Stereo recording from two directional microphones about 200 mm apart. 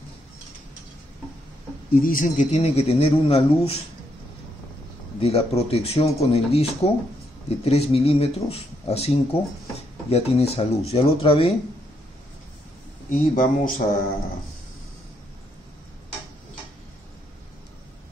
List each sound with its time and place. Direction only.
2.0 s speech: 45° left (ahead or behind)
5.2 s speech: 30° left (ahead or behind)
13.1 s speech: 40° left (ahead or behind)